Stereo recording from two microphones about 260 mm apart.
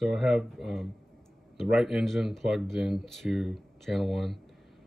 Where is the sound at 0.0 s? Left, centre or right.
Centre.